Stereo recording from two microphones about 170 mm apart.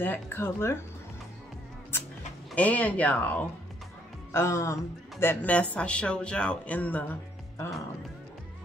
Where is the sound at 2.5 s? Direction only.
10° left (ahead or behind).